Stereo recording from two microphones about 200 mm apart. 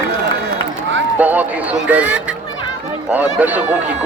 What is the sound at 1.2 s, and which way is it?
A man's voice, 10° right (ahead or behind).